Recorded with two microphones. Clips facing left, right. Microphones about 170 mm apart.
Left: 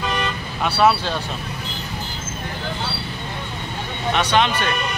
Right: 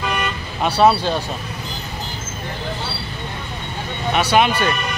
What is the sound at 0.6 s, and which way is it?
Speech, 15° right (ahead or behind).